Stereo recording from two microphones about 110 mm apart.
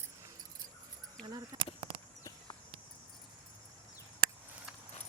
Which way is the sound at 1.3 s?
40° right (ahead or behind).